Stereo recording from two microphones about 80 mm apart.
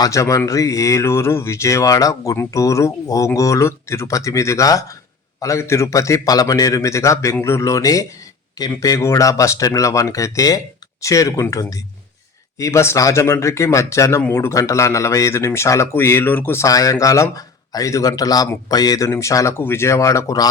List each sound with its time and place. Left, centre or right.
0.0 s speech: left
12.5 s speech: left
14.3 s a man's voice: left
14.5 s speech: left
16.6 s speech: left
19.0 s speech: left
19.5 s speech: left